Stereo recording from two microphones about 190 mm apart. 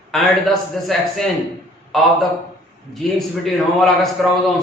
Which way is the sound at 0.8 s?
Centre (ahead or behind).